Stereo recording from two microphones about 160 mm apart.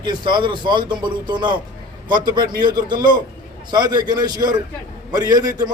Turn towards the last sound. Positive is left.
turn(degrees=-25)  # may be behind; listen again after turning